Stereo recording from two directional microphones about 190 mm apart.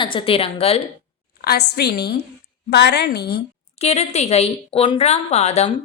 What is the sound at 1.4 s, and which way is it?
A woman's voice, 55° left (ahead or behind).